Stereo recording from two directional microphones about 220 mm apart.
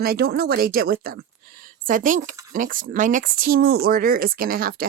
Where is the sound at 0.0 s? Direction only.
45° right (ahead or behind).